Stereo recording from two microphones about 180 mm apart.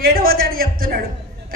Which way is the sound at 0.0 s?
55° right (ahead or behind).